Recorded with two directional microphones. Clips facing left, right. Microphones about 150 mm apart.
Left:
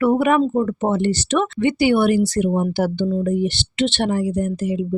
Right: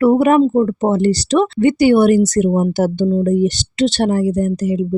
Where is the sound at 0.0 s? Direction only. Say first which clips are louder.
Right 5 dB; 40° right (ahead or behind).